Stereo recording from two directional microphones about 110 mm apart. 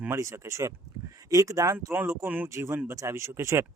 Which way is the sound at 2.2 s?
15° right (ahead or behind).